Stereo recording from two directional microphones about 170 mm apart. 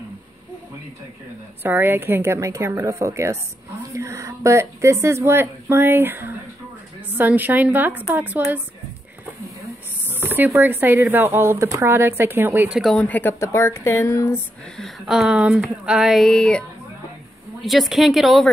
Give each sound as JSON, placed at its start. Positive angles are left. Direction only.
{"t": 1.6, "sound": "speech", "side_deg": -10}
{"t": 10.0, "sound": "speech", "side_deg": -10}
{"t": 14.8, "sound": "speech", "side_deg": 0}
{"t": 17.6, "sound": "speech", "side_deg": 0}